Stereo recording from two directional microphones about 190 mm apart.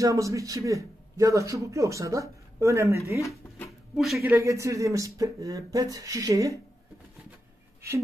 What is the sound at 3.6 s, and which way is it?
A man's voice, centre (ahead or behind).